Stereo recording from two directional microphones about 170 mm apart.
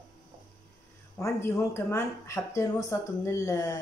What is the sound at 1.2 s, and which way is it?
A woman's voice, 15° left (ahead or behind).